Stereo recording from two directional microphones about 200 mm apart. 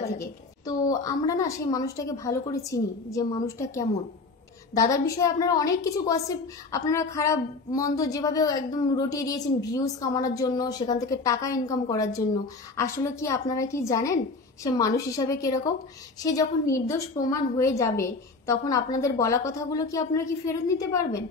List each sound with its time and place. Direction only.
0.2 s a woman's voice: 15° left (ahead or behind)